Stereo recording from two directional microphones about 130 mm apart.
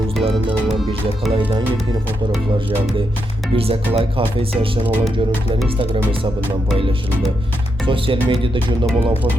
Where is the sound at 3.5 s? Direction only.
45° right (ahead or behind).